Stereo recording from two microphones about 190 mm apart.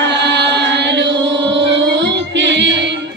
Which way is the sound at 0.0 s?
65° right (ahead or behind).